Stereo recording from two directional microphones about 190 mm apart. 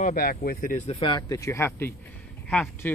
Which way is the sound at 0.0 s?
50° left (ahead or behind).